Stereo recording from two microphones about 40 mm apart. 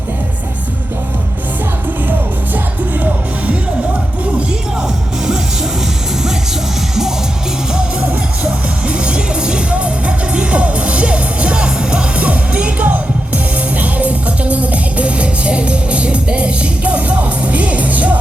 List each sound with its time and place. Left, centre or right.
3.0 s music: right
8.9 s music: right
12.1 s music: right
12.8 s music: right